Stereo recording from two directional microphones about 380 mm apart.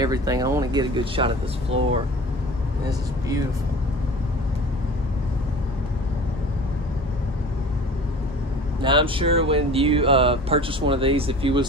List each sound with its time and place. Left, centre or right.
0.0 s speech: centre
2.9 s speech: centre
8.8 s speech: centre